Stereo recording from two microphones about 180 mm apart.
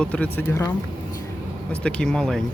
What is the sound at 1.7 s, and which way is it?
Speech, 5° left (ahead or behind).